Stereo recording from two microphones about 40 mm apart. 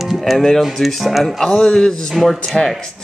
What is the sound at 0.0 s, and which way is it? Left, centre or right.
Speech, centre.